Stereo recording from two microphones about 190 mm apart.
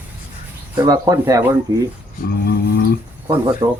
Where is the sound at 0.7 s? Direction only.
20° right (ahead or behind).